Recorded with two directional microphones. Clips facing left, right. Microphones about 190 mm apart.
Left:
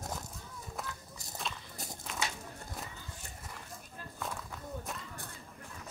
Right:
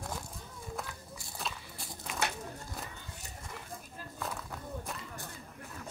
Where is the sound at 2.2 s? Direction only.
60° right (ahead or behind).